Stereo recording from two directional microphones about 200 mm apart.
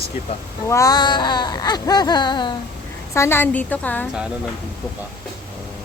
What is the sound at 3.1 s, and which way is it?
Speech, 10° left (ahead or behind).